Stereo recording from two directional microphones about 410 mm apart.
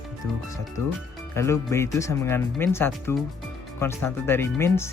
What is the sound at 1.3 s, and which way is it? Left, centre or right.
Speech, centre.